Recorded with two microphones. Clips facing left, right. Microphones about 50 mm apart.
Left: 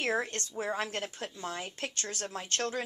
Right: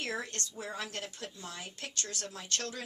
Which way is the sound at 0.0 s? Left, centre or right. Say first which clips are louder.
Left 6 dB; left.